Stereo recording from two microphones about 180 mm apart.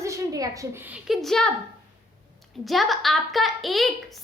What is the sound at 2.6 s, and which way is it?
A woman's voice, centre (ahead or behind).